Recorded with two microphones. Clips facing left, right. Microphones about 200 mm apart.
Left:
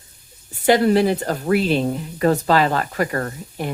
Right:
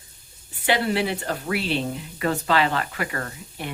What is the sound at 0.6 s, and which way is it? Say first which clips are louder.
Speech: left 8 dB; 45° left (ahead or behind).